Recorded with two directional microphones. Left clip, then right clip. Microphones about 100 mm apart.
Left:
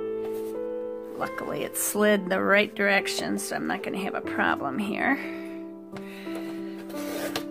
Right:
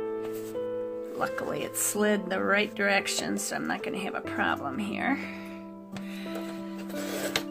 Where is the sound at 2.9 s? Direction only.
25° left (ahead or behind).